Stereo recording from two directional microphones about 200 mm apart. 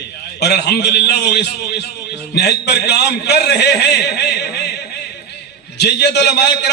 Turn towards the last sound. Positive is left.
turn(degrees=55)  # may be behind; listen again after turning